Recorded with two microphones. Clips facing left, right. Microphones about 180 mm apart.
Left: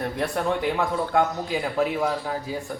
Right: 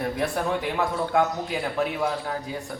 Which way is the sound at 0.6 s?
Centre (ahead or behind).